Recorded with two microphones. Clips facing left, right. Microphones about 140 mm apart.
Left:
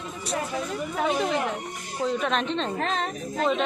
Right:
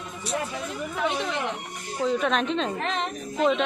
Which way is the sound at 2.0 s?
Centre (ahead or behind).